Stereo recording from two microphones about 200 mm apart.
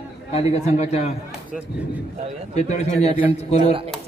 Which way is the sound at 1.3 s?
5° right (ahead or behind).